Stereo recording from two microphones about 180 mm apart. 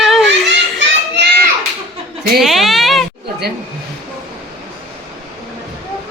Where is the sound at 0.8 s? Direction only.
75° right (ahead or behind).